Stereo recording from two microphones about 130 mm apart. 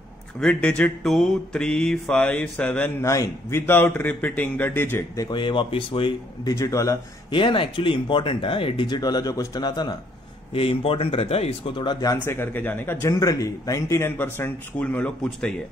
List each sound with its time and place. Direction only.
0.4 s mantra: 5° left (ahead or behind)
3.0 s mantra: 25° left (ahead or behind)
5.3 s speech: 40° left (ahead or behind)
6.4 s speech: 25° left (ahead or behind)
7.2 s speech: 40° left (ahead or behind)
10.5 s speech: 45° left (ahead or behind); by 15.5 s 10° left (ahead or behind)